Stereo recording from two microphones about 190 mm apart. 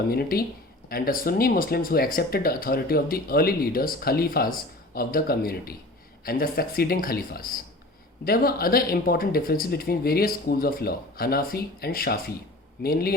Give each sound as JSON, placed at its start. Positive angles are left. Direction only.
{"t": 0.1, "sound": "speech", "side_deg": 55}